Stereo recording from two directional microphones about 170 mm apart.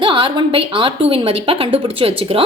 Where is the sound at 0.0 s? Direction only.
30° right (ahead or behind).